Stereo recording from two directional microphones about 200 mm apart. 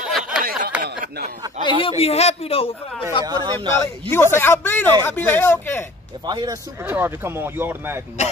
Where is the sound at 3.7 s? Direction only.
10° left (ahead or behind).